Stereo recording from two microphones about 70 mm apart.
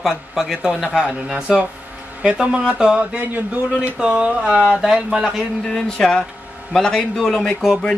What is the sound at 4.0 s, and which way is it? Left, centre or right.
Speech, centre.